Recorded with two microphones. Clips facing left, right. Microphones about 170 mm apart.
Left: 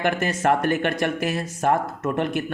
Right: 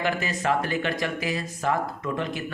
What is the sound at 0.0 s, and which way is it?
A man's voice, 55° left (ahead or behind).